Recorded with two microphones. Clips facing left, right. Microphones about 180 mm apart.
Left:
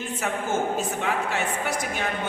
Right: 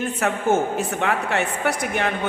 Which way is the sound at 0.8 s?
65° right (ahead or behind).